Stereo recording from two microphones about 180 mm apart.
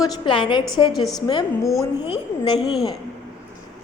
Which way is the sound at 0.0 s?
25° left (ahead or behind).